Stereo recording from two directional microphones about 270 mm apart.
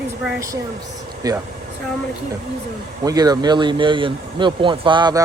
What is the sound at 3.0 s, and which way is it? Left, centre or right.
Speech, centre.